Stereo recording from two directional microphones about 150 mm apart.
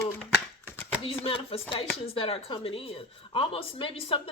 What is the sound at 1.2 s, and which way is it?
A woman's voice, 40° left (ahead or behind).